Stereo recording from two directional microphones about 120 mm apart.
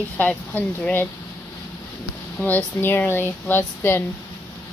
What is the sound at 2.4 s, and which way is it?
Speech, 15° left (ahead or behind).